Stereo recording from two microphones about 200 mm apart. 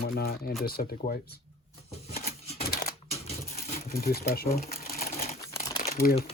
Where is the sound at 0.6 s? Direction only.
50° left (ahead or behind).